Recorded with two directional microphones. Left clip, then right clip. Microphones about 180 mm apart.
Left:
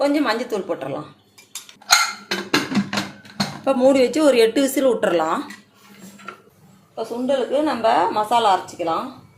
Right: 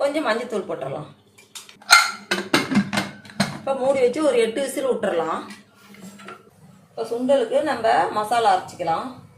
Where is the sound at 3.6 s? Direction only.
60° left (ahead or behind).